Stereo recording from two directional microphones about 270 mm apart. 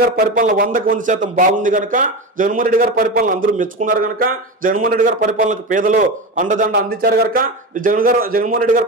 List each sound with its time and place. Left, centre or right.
0.0 s a man's voice: right